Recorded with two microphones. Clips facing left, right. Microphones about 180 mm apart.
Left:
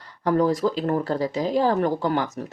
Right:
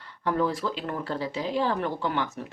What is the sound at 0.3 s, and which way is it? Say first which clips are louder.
A woman's voice: left 6 dB; 40° left (ahead or behind).